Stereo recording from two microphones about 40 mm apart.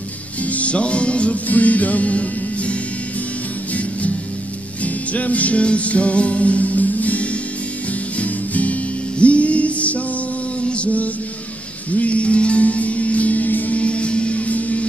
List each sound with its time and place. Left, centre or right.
0.4 s music: left
4.8 s music: left